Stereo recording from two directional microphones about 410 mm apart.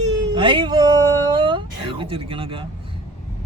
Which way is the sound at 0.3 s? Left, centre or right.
Centre.